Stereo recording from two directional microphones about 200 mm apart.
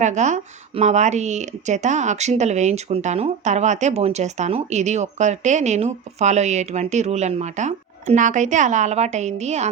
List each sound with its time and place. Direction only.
0.0 s speech: 35° right (ahead or behind)